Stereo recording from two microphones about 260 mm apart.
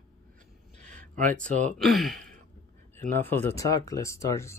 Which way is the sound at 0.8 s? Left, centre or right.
Right.